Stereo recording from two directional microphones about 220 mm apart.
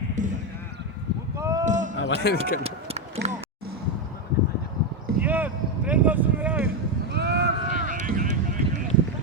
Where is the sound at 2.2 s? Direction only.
45° left (ahead or behind).